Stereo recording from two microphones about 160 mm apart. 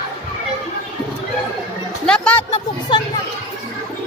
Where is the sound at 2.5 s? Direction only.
35° left (ahead or behind).